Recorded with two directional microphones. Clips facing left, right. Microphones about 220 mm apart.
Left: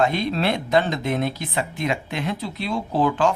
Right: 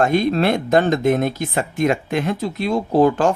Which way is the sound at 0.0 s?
50° right (ahead or behind).